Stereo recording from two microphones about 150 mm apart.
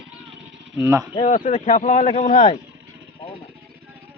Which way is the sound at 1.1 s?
40° left (ahead or behind).